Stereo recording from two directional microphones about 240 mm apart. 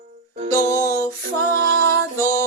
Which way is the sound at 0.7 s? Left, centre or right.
Centre.